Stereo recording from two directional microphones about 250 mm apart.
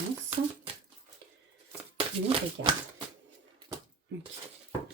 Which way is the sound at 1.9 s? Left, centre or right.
Right.